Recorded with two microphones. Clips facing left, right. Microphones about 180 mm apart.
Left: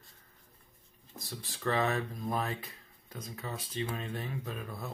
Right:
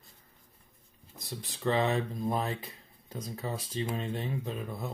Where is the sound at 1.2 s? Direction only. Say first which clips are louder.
Right 3 dB; 20° right (ahead or behind).